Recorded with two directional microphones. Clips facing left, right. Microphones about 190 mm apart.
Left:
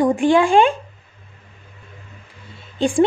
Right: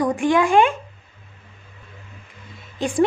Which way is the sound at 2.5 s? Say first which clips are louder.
Left 5 dB; 30° left (ahead or behind).